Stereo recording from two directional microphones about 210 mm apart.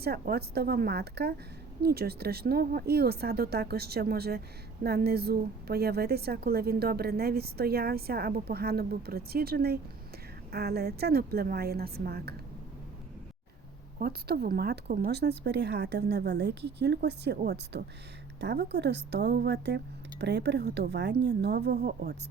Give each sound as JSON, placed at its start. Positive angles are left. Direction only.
{"t": 0.0, "sound": "a woman's voice", "side_deg": -50}
{"t": 14.0, "sound": "a woman's voice", "side_deg": -50}